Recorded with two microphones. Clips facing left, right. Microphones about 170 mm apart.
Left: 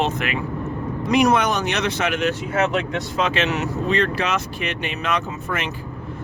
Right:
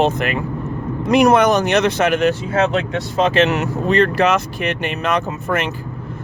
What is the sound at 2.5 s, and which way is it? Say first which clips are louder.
Speech: right 3 dB; 30° right (ahead or behind).